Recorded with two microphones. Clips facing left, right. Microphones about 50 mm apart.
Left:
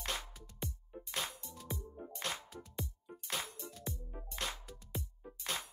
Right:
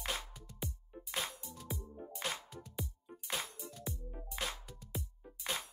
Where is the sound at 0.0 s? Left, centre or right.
Centre.